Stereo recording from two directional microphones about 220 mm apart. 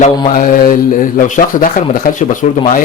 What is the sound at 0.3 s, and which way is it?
A man's voice, 35° left (ahead or behind).